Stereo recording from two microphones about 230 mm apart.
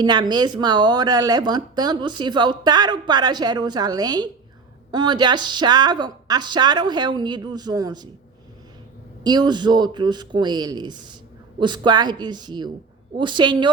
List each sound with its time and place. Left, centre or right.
0.0 s speech: centre
9.2 s speech: centre